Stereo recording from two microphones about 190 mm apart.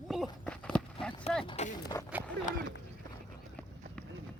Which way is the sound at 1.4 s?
25° left (ahead or behind).